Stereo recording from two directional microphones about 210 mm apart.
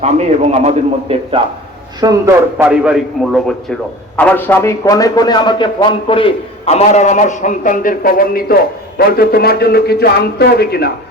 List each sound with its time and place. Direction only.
0.0 s a man's voice: 35° right (ahead or behind)
2.0 s a man's voice: 15° right (ahead or behind)
4.2 s a man's voice: 10° left (ahead or behind); by 10.9 s 50° left (ahead or behind)